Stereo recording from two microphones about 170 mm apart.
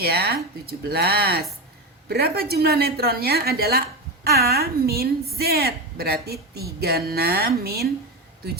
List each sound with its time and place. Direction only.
0.0 s a woman's voice: 70° right (ahead or behind)